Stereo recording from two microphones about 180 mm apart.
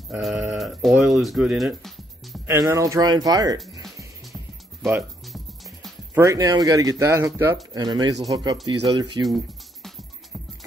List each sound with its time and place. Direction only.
0.1 s speech: centre (ahead or behind)
2.4 s speech: 15° right (ahead or behind)
6.1 s speech: 20° right (ahead or behind)